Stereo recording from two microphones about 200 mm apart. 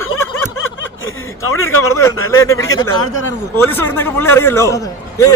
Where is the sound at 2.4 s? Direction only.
15° left (ahead or behind).